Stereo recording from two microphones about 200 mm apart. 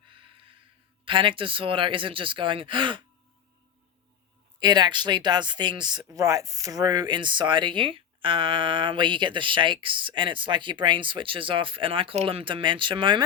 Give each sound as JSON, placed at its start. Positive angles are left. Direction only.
{"t": 0.1, "sound": "a sound", "side_deg": -25}
{"t": 1.0, "sound": "speech", "side_deg": -25}
{"t": 4.6, "sound": "speech", "side_deg": -20}